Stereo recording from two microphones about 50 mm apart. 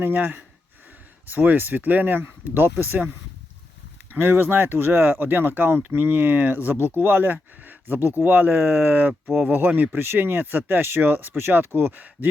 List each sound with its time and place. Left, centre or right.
0.0 s speech: right
4.1 s speech: right